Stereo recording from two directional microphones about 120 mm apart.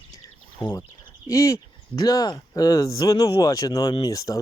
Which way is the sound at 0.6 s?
45° left (ahead or behind).